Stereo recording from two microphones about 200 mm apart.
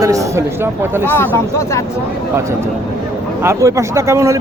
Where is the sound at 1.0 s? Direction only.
10° left (ahead or behind).